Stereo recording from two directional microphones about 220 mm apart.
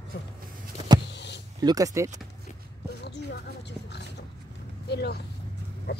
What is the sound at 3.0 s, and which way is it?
Oink, 50° left (ahead or behind).